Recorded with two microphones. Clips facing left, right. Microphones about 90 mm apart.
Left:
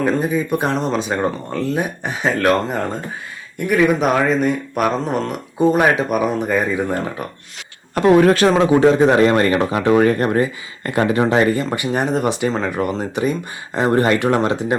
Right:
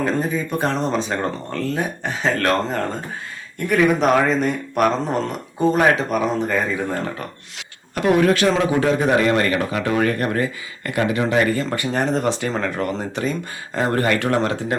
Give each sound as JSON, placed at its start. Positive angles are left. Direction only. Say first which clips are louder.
{"t": 0.0, "sound": "speech", "louder": "left 3 dB", "side_deg": 10}
{"t": 7.9, "sound": "a man's voice", "louder": "left 4 dB", "side_deg": 35}